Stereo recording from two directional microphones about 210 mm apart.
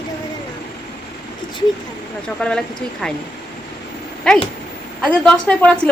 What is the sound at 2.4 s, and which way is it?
Speech, 5° left (ahead or behind).